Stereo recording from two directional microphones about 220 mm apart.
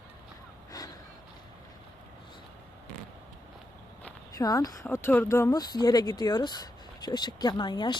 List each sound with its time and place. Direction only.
0.7 s gasp: 15° left (ahead or behind)
4.4 s speech: 15° left (ahead or behind)